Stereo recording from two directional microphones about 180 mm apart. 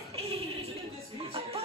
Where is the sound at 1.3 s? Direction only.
35° right (ahead or behind).